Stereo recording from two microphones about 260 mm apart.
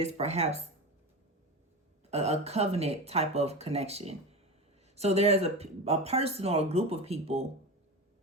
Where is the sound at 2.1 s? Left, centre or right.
Right.